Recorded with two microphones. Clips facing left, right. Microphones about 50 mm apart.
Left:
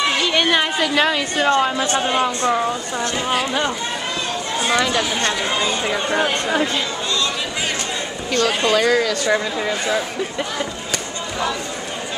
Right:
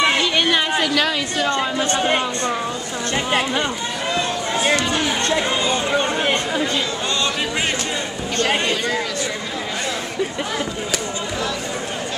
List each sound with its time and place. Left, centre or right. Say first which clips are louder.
0.3 s chatter: left 1 dB; centre
0.9 s a woman's voice: left 2 dB; left
4.7 s chatter: left 2 dB; left
8.4 s speech: left 2 dB; right